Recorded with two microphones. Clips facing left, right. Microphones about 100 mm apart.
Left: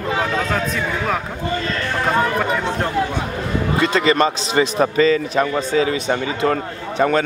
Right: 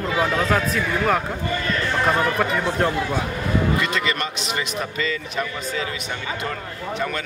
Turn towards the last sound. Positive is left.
turn(degrees=35)  # may be behind; listen again after turning